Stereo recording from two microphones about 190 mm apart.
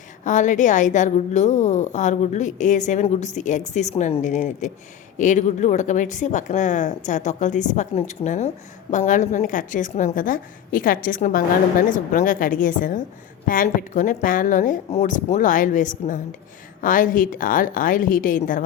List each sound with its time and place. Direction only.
0.3 s a woman's voice: 40° left (ahead or behind)